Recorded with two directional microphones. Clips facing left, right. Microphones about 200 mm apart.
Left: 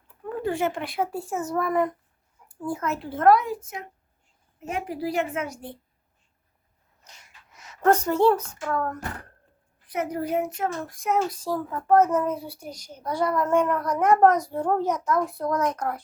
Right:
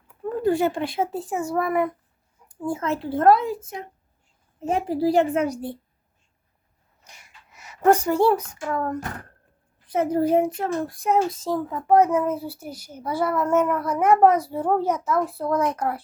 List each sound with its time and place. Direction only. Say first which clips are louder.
0.4 s a child's voice: right 5 dB; 35° right (ahead or behind); by 1.9 s 10° right (ahead or behind)
2.5 s a child's voice: right 3 dB; 25° right (ahead or behind)
7.0 s speech: right 2 dB; 10° right (ahead or behind)
9.9 s a child's voice: right 7 dB; 30° right (ahead or behind); by 16.0 s 5° right (ahead or behind)